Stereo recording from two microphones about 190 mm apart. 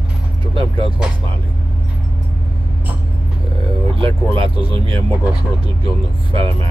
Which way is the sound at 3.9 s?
30° right (ahead or behind).